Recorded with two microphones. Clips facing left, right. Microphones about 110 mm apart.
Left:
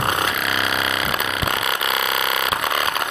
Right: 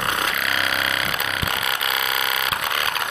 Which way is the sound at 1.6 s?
25° left (ahead or behind).